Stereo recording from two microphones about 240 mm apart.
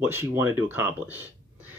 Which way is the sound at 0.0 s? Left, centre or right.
Centre.